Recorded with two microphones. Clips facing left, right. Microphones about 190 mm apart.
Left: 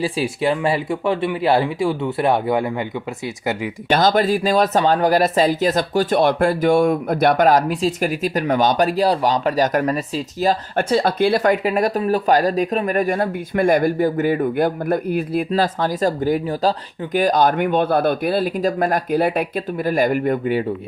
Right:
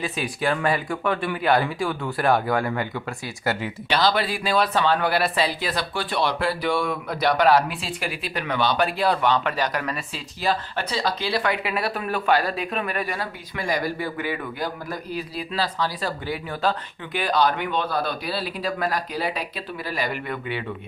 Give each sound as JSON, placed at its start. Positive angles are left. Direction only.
{"t": 0.0, "sound": "speech", "side_deg": 30}
{"t": 3.8, "sound": "speech", "side_deg": 45}